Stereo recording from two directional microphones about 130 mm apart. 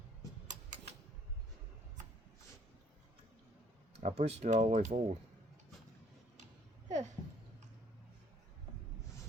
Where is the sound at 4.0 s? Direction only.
60° right (ahead or behind).